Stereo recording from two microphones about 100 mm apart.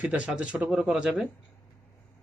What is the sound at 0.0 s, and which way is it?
Speech, 15° right (ahead or behind).